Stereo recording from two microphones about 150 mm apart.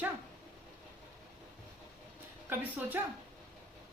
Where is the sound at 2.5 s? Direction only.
10° right (ahead or behind).